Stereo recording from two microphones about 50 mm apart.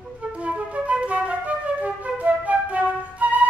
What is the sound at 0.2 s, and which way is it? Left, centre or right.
Flute, right.